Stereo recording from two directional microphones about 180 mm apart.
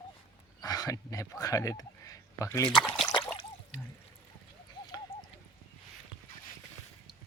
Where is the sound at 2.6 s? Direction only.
5° left (ahead or behind).